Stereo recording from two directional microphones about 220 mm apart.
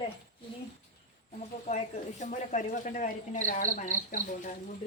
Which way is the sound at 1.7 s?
35° left (ahead or behind).